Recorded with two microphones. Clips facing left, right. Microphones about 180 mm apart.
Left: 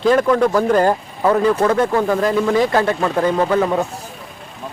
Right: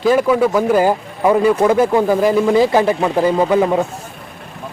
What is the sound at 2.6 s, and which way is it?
Speech, 25° right (ahead or behind).